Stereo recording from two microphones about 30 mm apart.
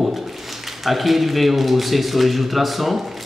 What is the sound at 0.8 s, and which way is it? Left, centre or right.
Speech, centre.